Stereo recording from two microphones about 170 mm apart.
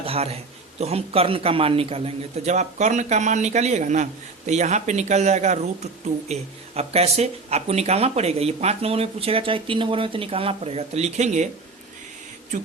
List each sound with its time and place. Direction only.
0.0 s a man's voice: 35° right (ahead or behind)